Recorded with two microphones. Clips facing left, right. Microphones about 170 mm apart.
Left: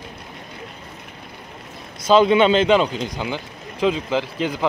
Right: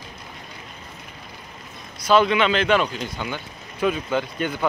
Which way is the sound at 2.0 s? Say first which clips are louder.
Left 4 dB; 25° left (ahead or behind).